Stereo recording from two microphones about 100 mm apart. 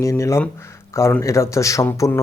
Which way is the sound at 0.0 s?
30° left (ahead or behind).